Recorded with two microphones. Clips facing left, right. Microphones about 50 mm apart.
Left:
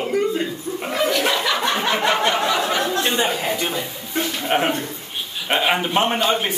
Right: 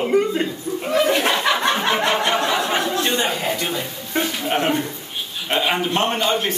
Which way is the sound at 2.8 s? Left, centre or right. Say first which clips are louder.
Even; centre.